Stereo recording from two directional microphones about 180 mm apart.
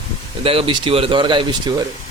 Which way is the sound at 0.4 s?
30° right (ahead or behind).